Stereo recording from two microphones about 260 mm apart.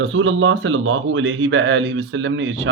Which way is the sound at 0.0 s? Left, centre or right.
Right.